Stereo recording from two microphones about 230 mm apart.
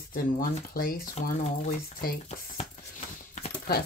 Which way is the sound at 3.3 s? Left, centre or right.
Left.